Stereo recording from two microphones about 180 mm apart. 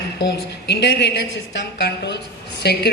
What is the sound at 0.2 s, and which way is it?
A woman's voice, 70° left (ahead or behind).